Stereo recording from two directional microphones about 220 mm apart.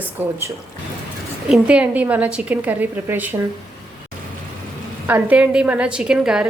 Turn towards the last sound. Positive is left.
turn(degrees=-5)  # may be behind; listen again after turning